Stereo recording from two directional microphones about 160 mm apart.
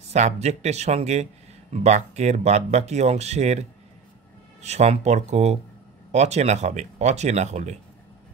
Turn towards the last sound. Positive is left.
turn(degrees=-45)  # may be behind; listen again after turning